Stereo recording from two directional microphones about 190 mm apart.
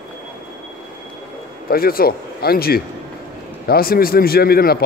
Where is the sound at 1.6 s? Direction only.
50° left (ahead or behind).